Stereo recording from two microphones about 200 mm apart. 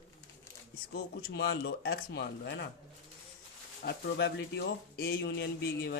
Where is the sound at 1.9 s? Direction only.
55° left (ahead or behind).